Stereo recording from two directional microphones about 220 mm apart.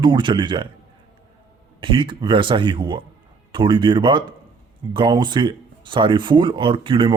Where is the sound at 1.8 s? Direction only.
20° right (ahead or behind).